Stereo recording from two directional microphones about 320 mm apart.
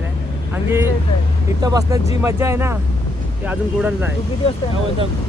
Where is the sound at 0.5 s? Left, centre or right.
Centre.